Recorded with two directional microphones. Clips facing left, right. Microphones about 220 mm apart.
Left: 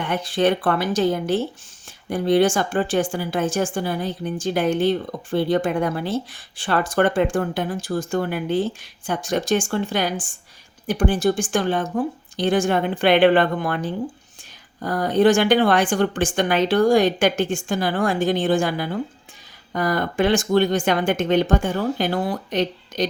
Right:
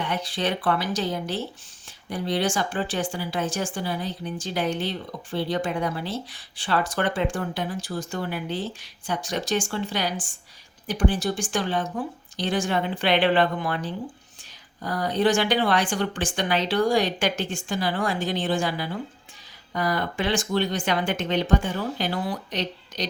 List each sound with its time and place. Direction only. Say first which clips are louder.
0.0 s speech: left 7 dB; 50° left (ahead or behind)